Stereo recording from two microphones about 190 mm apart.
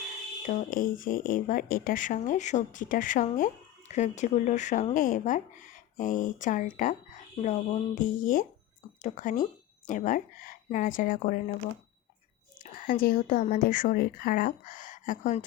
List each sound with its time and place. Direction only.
0.4 s a woman's voice: 45° left (ahead or behind)
12.5 s a woman's voice: 45° left (ahead or behind)